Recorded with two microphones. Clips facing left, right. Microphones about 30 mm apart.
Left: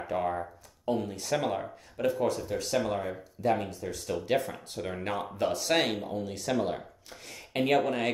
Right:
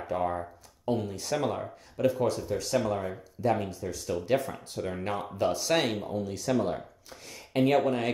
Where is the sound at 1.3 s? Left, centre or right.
Centre.